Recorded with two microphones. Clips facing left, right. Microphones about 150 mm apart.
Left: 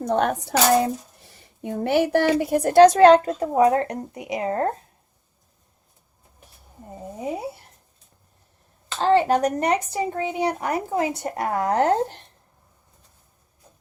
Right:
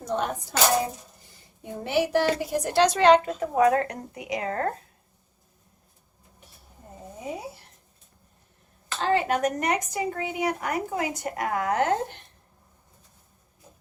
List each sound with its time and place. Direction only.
0.0 s speech: 60° left (ahead or behind)
1.7 s a woman's voice: 50° left (ahead or behind)
3.5 s speech: 25° left (ahead or behind)
9.0 s a woman's voice: 30° left (ahead or behind)